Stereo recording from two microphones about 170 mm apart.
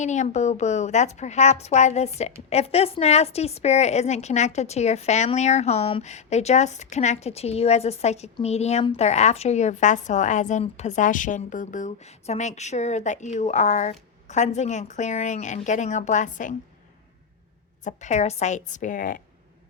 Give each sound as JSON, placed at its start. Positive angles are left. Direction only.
{"t": 0.0, "sound": "a woman's voice", "side_deg": 45}
{"t": 17.8, "sound": "a woman's voice", "side_deg": 45}